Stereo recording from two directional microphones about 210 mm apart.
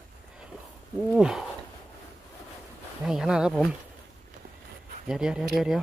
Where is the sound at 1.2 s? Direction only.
5° right (ahead or behind).